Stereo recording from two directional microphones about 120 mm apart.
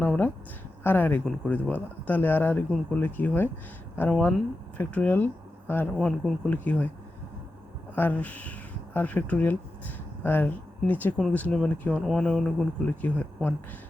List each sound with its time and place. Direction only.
0.9 s speech: 15° left (ahead or behind)
2.6 s speech: 5° left (ahead or behind)
3.0 s speech: 15° left (ahead or behind)
5.9 s speech: 5° left (ahead or behind)
7.9 s speech: 15° left (ahead or behind)